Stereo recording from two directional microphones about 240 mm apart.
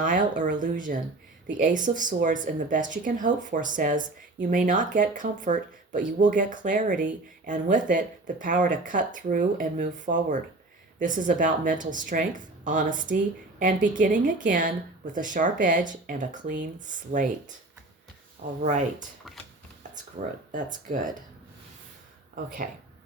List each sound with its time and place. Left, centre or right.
0.0 s speech: right
18.4 s speech: right
20.2 s speech: right
22.4 s speech: right